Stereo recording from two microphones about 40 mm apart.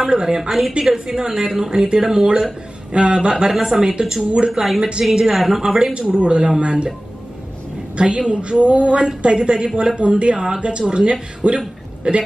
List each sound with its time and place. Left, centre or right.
0.0 s speech: centre
0.4 s a woman's voice: centre; by 4.7 s right
5.1 s a woman's voice: centre
5.6 s speech: centre
7.9 s a woman's voice: right
10.3 s speech: centre
10.6 s speech: right